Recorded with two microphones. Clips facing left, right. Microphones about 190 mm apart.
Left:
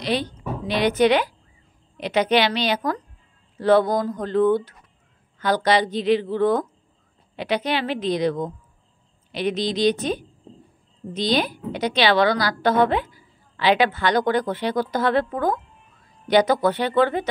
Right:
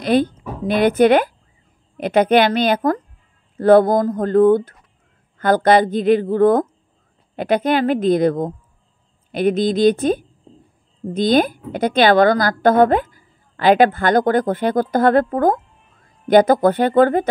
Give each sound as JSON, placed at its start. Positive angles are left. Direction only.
{"t": 0.0, "sound": "a woman's voice", "side_deg": -50}